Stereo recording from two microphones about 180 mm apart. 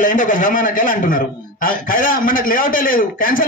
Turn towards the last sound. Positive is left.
turn(degrees=50)  # may be behind; listen again after turning